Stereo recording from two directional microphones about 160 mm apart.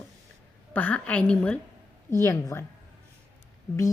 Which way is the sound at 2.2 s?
20° left (ahead or behind).